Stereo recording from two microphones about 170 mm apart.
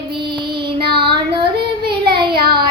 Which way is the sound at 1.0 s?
30° right (ahead or behind).